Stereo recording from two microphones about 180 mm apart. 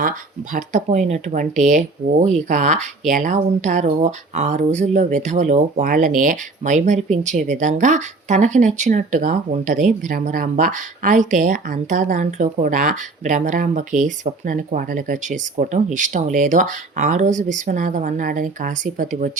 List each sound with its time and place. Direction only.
0.5 s speech: 40° right (ahead or behind)